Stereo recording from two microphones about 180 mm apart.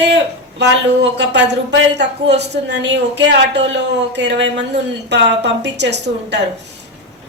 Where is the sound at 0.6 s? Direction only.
75° right (ahead or behind).